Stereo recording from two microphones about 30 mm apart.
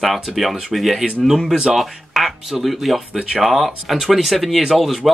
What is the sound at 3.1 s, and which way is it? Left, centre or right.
Speech, centre.